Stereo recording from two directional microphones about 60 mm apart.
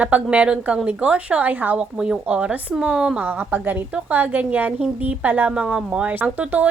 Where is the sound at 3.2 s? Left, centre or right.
Right.